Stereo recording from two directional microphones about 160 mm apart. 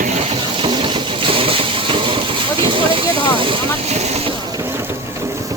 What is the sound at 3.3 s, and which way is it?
Vehicle, 30° right (ahead or behind).